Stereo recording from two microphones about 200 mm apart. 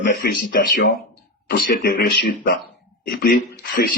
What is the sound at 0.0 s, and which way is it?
Speech, 55° left (ahead or behind).